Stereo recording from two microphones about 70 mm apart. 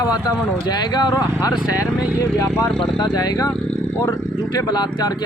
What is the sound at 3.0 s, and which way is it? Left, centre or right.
Speech, left.